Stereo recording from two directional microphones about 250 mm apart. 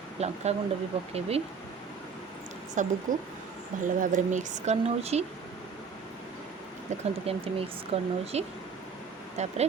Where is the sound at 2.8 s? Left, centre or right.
Right.